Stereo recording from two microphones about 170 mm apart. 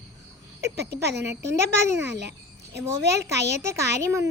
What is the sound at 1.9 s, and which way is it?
Speech, 75° right (ahead or behind).